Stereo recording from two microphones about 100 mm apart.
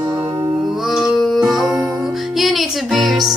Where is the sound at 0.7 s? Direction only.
Centre (ahead or behind).